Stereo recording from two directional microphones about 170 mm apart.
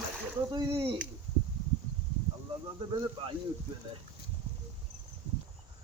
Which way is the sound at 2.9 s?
30° right (ahead or behind).